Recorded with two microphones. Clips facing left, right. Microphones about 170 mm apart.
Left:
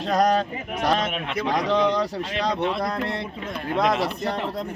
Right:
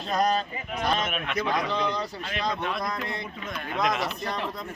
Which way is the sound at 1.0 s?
30° left (ahead or behind).